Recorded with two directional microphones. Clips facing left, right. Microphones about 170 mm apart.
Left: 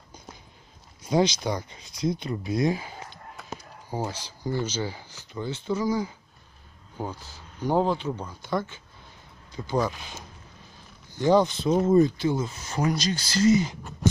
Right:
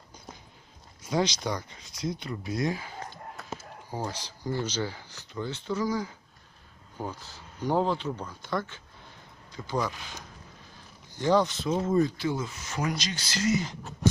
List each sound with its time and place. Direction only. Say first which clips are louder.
1.2 s speech: left 4 dB; 10° left (ahead or behind)
1.5 s speech: left 3 dB; 30° left (ahead or behind)
4.0 s speech: left 2 dB; 5° left (ahead or behind)
7.6 s speech: left 3 dB; 10° left (ahead or behind)
11.2 s speech: left 4 dB; 15° left (ahead or behind); by 13.6 s 35° left (ahead or behind)